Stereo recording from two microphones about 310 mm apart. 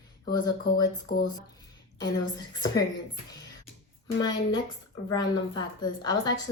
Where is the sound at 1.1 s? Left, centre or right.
Left.